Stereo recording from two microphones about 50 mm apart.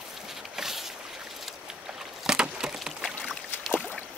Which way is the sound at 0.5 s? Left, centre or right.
Centre.